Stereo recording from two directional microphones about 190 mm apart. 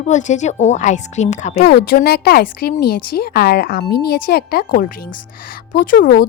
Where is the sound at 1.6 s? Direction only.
60° left (ahead or behind).